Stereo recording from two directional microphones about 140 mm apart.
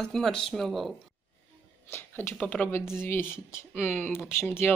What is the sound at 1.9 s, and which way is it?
Speech, 15° left (ahead or behind).